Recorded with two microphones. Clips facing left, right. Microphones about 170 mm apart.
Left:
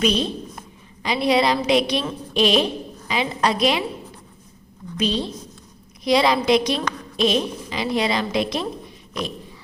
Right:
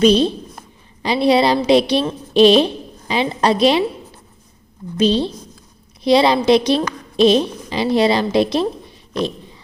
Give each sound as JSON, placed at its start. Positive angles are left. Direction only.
{"t": 0.0, "sound": "a woman's voice", "side_deg": -30}
{"t": 4.9, "sound": "a woman's voice", "side_deg": -30}